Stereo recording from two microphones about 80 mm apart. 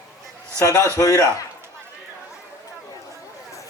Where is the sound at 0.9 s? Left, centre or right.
Left.